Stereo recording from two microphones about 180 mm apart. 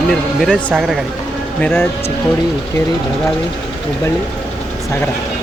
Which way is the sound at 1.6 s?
10° left (ahead or behind).